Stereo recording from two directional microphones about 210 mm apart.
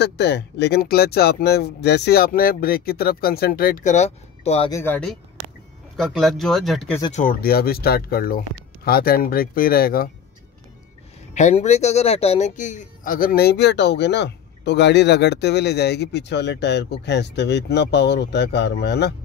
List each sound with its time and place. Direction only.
0.0 s a man's voice: 50° left (ahead or behind); by 4.6 s 30° left (ahead or behind)
4.6 s speech: 10° left (ahead or behind)
7.1 s a man's voice: 35° left (ahead or behind)
11.3 s a man's voice: 35° left (ahead or behind); by 19.1 s 55° left (ahead or behind)